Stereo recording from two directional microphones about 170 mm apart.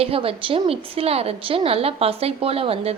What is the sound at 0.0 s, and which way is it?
A woman's voice, 35° right (ahead or behind).